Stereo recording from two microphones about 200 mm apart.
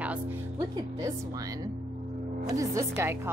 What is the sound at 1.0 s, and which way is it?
A woman's voice, 15° right (ahead or behind).